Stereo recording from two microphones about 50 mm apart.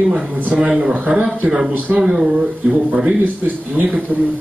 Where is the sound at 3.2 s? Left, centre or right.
Right.